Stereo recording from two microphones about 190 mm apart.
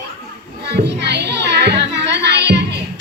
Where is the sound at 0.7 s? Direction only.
65° right (ahead or behind).